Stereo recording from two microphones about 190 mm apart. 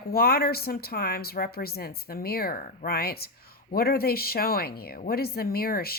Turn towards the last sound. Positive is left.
turn(degrees=55)  # may be behind; listen again after turning